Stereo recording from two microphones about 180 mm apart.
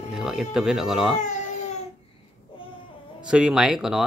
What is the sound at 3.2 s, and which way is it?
Speech, 5° right (ahead or behind).